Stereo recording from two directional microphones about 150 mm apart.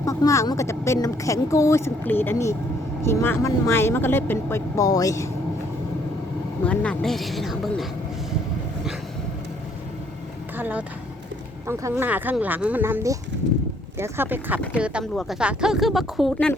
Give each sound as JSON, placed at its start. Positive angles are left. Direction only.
{"t": 0.0, "sound": "speech", "side_deg": 20}
{"t": 6.7, "sound": "speech", "side_deg": 5}
{"t": 10.6, "sound": "speech", "side_deg": -10}